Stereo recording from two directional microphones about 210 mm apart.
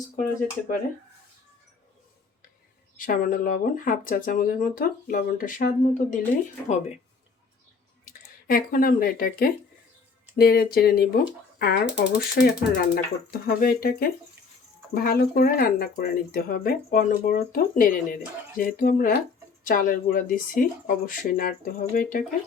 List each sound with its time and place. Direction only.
3.0 s speech: 40° left (ahead or behind)
8.4 s speech: 45° left (ahead or behind)